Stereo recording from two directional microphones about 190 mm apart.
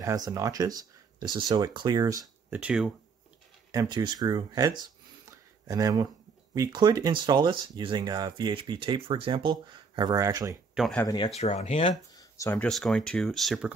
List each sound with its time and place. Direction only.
0.0 s speech: 20° right (ahead or behind)
2.6 s speech: 5° right (ahead or behind)
3.7 s speech: 25° right (ahead or behind)
10.7 s a sound: centre (ahead or behind)
11.0 s speech: 20° left (ahead or behind)
11.3 s speech: 35° left (ahead or behind)
12.1 s a sound: 20° left (ahead or behind)
12.5 s speech: 5° left (ahead or behind)